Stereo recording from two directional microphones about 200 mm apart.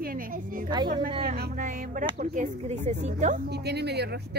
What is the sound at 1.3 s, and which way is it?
Speech, 45° right (ahead or behind).